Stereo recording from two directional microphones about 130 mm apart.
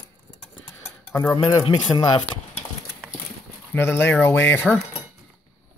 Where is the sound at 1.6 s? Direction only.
40° left (ahead or behind).